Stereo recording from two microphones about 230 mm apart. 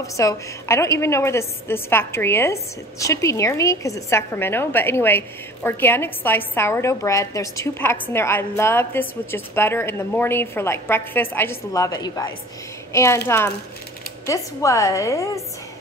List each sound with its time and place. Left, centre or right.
0.0 s a woman's voice: centre
14.2 s a woman's voice: centre